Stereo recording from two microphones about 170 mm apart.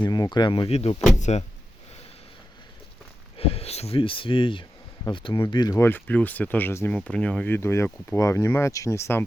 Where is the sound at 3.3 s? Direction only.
35° left (ahead or behind).